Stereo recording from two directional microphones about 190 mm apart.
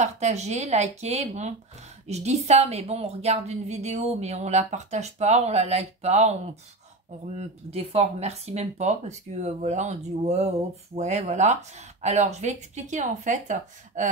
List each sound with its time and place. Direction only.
0.0 s a woman's voice: 35° right (ahead or behind)
7.3 s a woman's voice: 35° right (ahead or behind)